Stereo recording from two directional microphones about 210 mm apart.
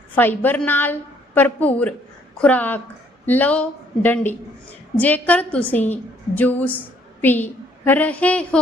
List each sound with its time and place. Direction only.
0.1 s a woman's voice: 10° left (ahead or behind)